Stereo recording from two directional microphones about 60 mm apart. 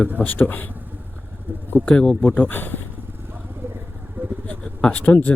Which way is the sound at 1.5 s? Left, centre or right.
Right.